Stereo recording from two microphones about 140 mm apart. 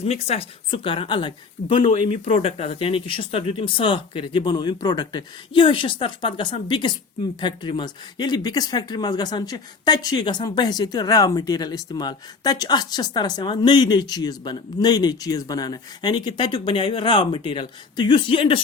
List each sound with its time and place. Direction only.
0.0 s speech: 45° left (ahead or behind)